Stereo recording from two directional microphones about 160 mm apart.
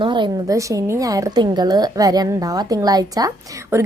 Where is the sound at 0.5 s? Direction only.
20° right (ahead or behind).